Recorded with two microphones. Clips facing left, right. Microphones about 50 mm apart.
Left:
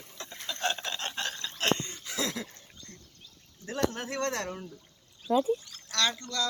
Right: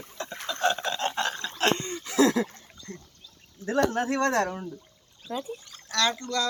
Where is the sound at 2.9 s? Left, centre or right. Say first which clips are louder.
Right 13 dB; right.